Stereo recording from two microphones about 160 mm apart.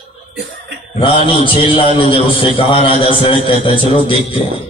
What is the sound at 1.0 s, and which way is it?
A man's voice, 35° left (ahead or behind).